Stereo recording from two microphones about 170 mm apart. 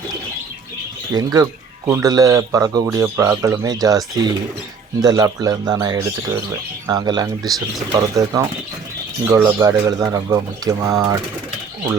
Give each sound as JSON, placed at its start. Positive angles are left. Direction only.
{"t": 1.1, "sound": "a man's voice", "side_deg": -20}